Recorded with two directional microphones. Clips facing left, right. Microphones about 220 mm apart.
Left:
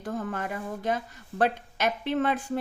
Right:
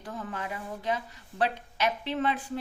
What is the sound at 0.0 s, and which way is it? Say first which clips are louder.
A woman's voice: left 5 dB; 45° left (ahead or behind).